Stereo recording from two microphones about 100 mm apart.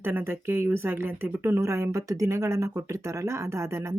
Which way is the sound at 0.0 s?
20° right (ahead or behind).